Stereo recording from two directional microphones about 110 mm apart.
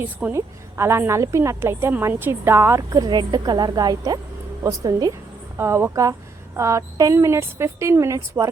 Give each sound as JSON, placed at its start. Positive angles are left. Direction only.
{"t": 0.0, "sound": "a woman's voice", "side_deg": -20}
{"t": 5.5, "sound": "a woman's voice", "side_deg": -20}